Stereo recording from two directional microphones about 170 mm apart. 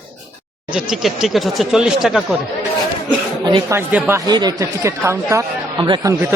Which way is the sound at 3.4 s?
25° right (ahead or behind).